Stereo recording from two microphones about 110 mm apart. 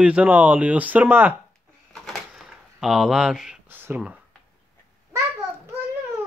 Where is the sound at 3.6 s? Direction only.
20° right (ahead or behind).